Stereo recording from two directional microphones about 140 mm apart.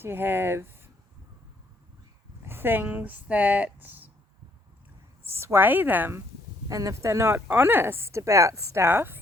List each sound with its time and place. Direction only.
0.0 s a woman's voice: 15° right (ahead or behind)
2.4 s speech: 15° right (ahead or behind)
5.2 s a woman's voice: 20° right (ahead or behind)